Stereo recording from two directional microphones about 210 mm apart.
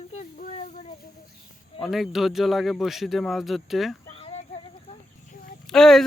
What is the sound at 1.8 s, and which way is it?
Speech, centre (ahead or behind).